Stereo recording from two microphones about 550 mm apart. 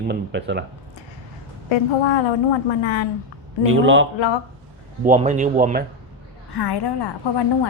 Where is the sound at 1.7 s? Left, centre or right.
Left.